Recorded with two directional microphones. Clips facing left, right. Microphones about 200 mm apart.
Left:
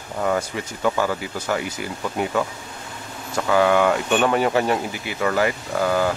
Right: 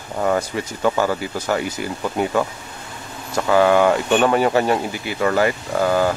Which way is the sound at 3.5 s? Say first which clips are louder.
Right 3 dB; 35° right (ahead or behind).